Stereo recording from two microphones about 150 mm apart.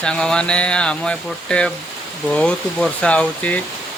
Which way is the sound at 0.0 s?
5° left (ahead or behind).